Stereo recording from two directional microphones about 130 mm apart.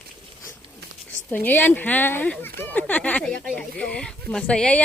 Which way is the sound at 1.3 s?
15° left (ahead or behind).